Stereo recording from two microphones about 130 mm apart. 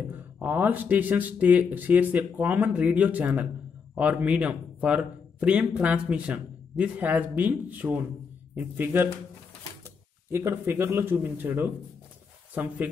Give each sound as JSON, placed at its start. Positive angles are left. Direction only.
{"t": 0.4, "sound": "speech", "side_deg": -15}
{"t": 10.3, "sound": "speech", "side_deg": -20}